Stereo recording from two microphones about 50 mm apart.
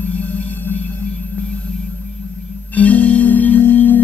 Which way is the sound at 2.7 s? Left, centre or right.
Left.